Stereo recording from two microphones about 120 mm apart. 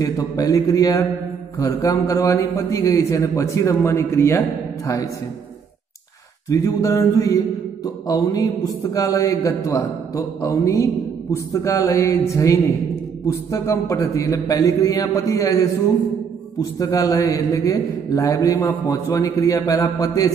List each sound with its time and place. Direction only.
0.0 s a man's voice: 30° left (ahead or behind)
6.5 s a man's voice: 25° left (ahead or behind)